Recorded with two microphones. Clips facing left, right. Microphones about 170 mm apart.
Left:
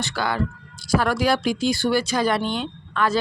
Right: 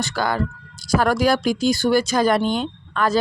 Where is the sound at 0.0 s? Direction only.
45° right (ahead or behind).